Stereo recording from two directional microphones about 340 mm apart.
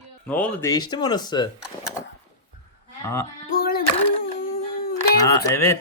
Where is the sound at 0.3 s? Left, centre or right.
Centre.